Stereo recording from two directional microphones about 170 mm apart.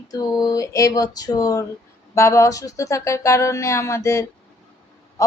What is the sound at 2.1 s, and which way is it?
Speech, 15° left (ahead or behind).